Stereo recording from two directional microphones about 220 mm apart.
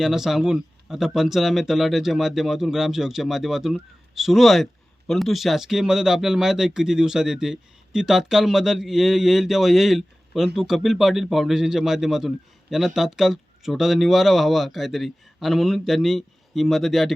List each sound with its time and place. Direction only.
0.0 s speech: centre (ahead or behind)